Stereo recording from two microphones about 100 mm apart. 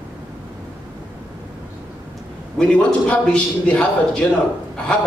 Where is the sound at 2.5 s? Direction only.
10° left (ahead or behind).